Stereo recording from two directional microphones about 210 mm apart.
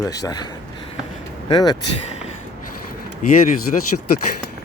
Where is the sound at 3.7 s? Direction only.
35° left (ahead or behind).